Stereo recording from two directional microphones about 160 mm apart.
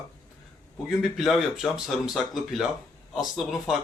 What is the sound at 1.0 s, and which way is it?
Speech, centre (ahead or behind).